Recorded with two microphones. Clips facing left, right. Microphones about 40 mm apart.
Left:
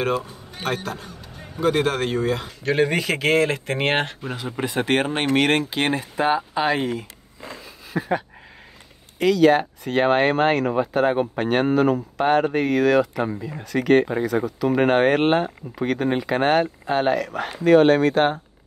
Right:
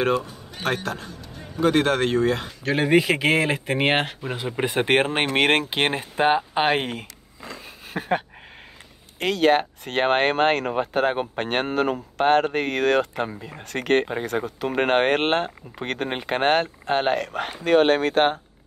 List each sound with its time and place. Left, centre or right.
0.7 s speech: centre
2.9 s speech: centre
4.6 s speech: right
7.9 s a sound: right
9.2 s speech: right